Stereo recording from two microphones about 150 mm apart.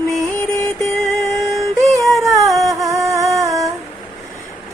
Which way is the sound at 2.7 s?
20° right (ahead or behind).